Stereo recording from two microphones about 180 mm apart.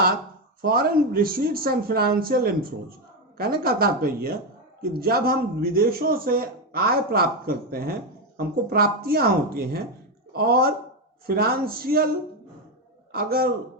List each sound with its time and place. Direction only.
0.6 s speech: 55° right (ahead or behind)
13.1 s speech: 55° right (ahead or behind)